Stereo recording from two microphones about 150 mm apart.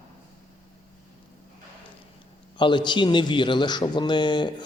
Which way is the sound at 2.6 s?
30° left (ahead or behind).